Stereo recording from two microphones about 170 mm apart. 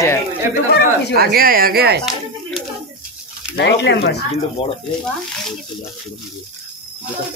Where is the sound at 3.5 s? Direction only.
85° left.